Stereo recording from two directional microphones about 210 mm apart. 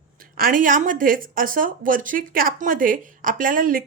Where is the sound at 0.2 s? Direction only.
40° right (ahead or behind).